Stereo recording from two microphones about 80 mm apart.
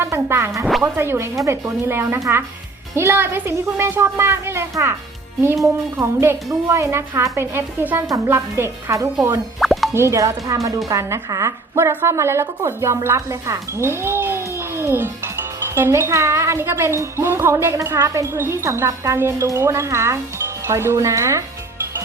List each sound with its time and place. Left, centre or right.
0.0 s a woman's voice: right
2.1 s a woman's voice: right
6.0 s a woman's voice: right
9.6 s plop: centre
9.9 s a woman's voice: right